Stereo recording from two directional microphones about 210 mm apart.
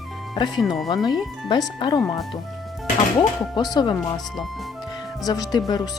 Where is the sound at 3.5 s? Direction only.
20° left (ahead or behind).